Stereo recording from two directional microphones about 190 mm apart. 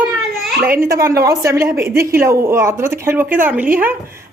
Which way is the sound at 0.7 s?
50° right (ahead or behind).